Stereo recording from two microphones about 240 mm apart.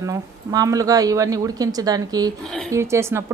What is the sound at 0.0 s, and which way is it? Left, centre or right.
Speech, centre.